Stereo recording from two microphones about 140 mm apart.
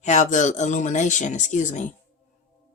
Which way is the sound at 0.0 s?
60° left (ahead or behind).